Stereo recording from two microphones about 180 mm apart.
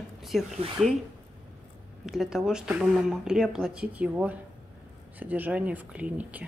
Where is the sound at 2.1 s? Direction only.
5° right (ahead or behind).